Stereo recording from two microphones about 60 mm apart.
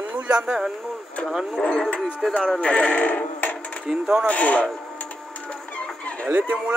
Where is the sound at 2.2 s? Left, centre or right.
Centre.